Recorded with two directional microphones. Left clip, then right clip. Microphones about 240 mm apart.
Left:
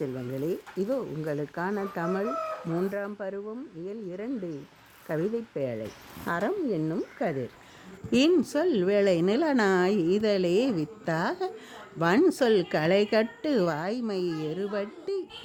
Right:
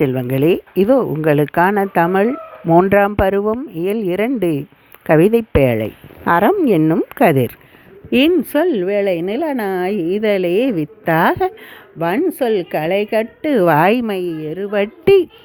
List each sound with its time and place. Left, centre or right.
0.0 s speech: right
11.9 s a woman's voice: centre
13.4 s speech: right